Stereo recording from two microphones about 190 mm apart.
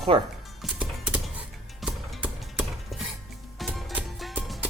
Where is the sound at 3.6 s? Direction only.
Centre (ahead or behind).